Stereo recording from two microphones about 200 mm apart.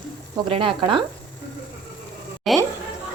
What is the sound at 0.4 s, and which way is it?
Speech, 25° right (ahead or behind).